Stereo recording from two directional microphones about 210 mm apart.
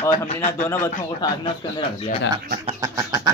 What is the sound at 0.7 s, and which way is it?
Speech, 15° left (ahead or behind).